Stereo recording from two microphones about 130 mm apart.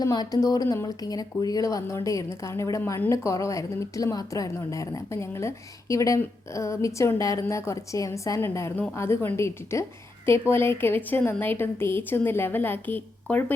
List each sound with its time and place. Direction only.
0.0 s a woman's voice: 30° left (ahead or behind)